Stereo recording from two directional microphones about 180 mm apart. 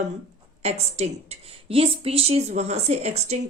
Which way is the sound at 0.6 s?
35° right (ahead or behind).